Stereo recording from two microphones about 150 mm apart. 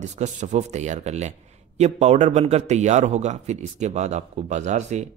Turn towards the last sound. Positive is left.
turn(degrees=-50)  # may be behind; listen again after turning